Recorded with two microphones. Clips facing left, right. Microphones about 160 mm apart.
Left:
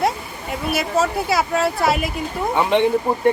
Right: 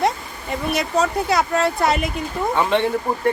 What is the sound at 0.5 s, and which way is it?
Speech, 5° left (ahead or behind).